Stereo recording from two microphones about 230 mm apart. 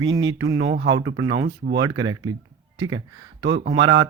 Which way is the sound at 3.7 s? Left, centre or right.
Right.